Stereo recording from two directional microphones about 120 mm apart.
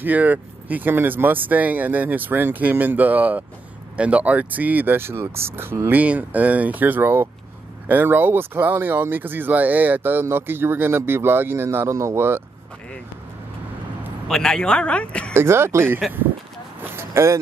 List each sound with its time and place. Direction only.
0.0 s speech: 15° right (ahead or behind)
14.2 s speech: 5° left (ahead or behind)
15.3 s speech: 20° right (ahead or behind)
16.9 s vehicle: 25° right (ahead or behind)